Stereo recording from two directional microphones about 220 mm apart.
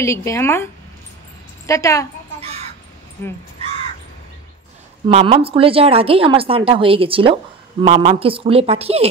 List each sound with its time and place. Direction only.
0.0 s speech: 15° left (ahead or behind)
1.7 s speech: 15° left (ahead or behind)
3.2 s speech: 10° left (ahead or behind)
5.0 s speech: 25° right (ahead or behind)